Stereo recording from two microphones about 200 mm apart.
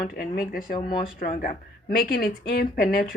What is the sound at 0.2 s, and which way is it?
A woman's voice, 45° left (ahead or behind).